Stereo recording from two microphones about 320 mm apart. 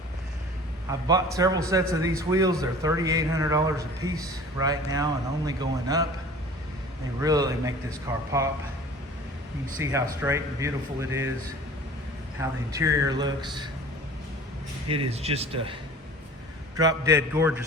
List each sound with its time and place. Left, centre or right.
0.9 s a man's voice: centre
7.2 s a man's voice: centre
9.7 s a man's voice: centre
12.4 s a man's voice: centre
14.8 s a man's voice: centre